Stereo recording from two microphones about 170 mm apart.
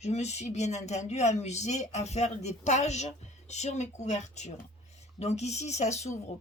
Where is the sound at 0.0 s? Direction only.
40° left (ahead or behind).